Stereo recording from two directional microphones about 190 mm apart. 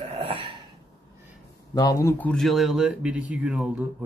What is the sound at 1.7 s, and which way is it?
Speech, 20° left (ahead or behind).